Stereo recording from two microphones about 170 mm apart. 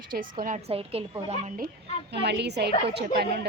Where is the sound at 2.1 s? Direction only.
80° right.